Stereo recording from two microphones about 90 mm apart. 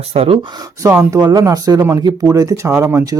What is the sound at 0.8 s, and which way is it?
Speech, 35° right (ahead or behind).